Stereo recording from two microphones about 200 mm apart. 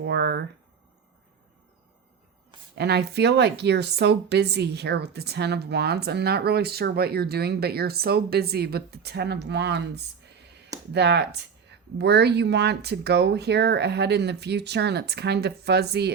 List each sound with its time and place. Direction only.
0.0 s speech: 55° right (ahead or behind)
2.7 s speech: 55° right (ahead or behind)